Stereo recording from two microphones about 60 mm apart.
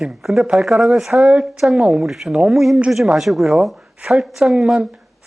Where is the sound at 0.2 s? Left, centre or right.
Centre.